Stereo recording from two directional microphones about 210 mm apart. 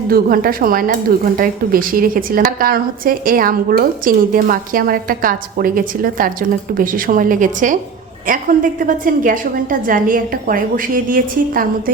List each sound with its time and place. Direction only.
0.1 s a woman's voice: 45° right (ahead or behind)